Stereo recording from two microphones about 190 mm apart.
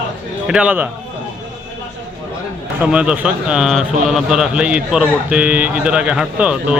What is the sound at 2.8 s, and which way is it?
A man's voice, 5° right (ahead or behind).